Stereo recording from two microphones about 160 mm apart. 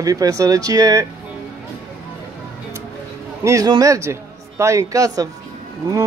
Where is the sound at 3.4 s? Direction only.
20° right (ahead or behind).